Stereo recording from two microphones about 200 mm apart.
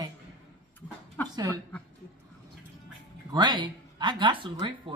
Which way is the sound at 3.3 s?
20° right (ahead or behind).